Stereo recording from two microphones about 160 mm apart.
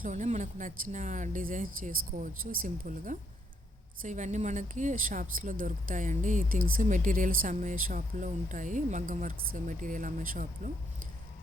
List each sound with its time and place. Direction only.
0.0 s speech: 50° right (ahead or behind)